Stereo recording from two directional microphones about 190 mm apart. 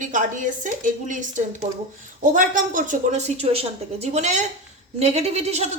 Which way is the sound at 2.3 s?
45° right (ahead or behind).